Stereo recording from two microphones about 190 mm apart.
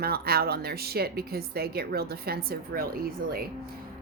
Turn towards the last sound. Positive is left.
turn(degrees=-50)  # may be behind; listen again after turning